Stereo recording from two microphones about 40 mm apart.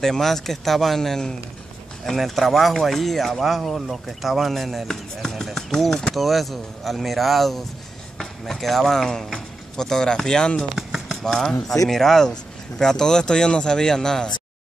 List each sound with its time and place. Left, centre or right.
0.0 s speech: centre
6.1 s speech: centre
10.8 s a sound: centre
11.2 s speech: centre